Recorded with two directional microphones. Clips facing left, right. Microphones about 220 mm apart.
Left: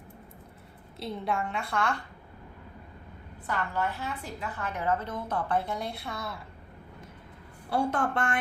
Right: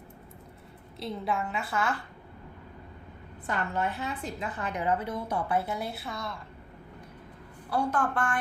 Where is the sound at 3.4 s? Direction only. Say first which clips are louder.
Right 1 dB; 20° right (ahead or behind); by 6.4 s 5° left (ahead or behind).